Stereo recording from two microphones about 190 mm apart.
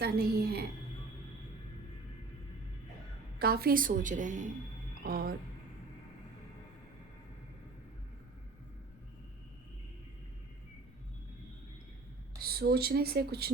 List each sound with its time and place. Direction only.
0.0 s a woman's voice: 55° right (ahead or behind)
3.3 s a woman's voice: 55° right (ahead or behind)
5.0 s a woman's voice: 50° right (ahead or behind)
12.4 s speech: 55° right (ahead or behind)